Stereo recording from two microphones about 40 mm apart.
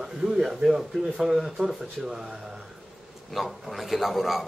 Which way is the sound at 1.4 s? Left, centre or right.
Centre.